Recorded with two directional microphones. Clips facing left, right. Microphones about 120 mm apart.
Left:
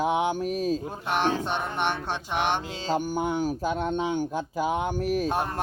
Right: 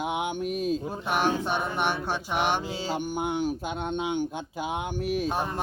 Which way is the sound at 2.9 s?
40° left (ahead or behind).